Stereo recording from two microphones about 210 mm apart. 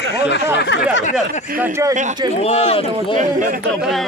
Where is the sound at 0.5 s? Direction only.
55° left (ahead or behind).